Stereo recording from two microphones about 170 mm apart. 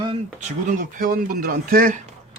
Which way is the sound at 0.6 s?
50° right (ahead or behind).